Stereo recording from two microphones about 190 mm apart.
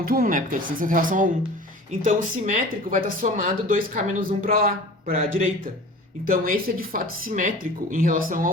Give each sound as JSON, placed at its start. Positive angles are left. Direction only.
{"t": 0.0, "sound": "speech", "side_deg": -50}